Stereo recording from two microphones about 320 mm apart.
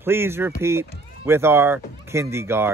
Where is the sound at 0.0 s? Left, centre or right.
Centre.